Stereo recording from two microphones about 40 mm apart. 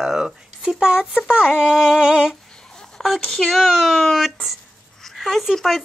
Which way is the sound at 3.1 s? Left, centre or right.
Centre.